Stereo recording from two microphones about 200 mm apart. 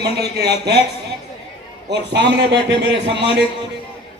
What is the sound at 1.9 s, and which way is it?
Speech, 60° right (ahead or behind).